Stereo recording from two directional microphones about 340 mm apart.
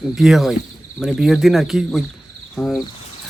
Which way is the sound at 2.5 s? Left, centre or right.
Centre.